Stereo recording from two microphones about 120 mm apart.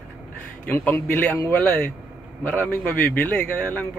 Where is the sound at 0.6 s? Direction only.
15° left (ahead or behind).